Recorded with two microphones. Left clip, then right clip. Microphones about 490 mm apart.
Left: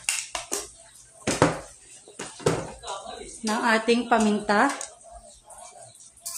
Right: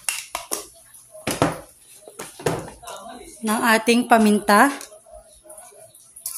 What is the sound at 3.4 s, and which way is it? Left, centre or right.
A woman's voice, right.